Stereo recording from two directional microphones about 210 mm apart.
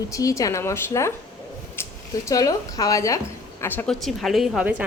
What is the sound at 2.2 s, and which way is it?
A woman's voice, 15° left (ahead or behind).